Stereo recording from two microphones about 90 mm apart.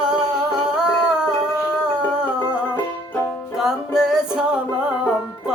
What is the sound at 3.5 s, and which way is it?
Music, 5° right (ahead or behind).